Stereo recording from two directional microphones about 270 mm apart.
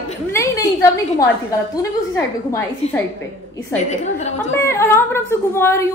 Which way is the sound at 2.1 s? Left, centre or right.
Centre.